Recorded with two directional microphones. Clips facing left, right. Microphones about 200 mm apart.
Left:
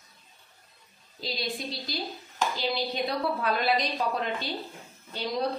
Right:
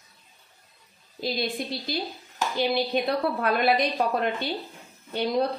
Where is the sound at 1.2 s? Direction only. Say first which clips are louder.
Right 5 dB; 60° right (ahead or behind).